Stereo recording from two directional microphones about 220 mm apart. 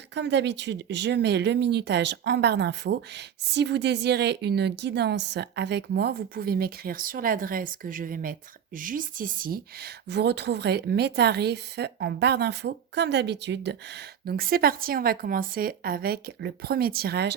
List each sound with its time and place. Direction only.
0.1 s speech: 55° right (ahead or behind)